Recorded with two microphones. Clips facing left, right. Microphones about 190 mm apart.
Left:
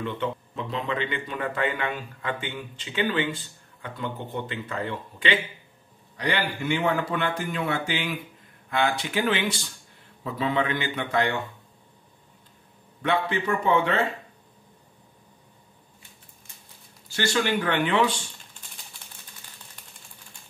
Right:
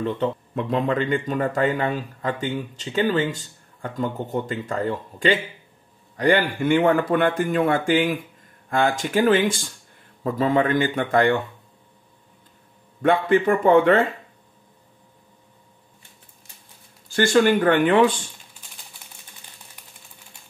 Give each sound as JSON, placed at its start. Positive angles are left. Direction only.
{"t": 0.2, "sound": "speech", "side_deg": -40}
{"t": 0.6, "sound": "speech", "side_deg": -50}
{"t": 13.0, "sound": "speech", "side_deg": -50}
{"t": 17.1, "sound": "speech", "side_deg": -50}